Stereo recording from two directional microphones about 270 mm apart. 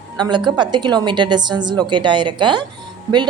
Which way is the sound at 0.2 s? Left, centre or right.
Centre.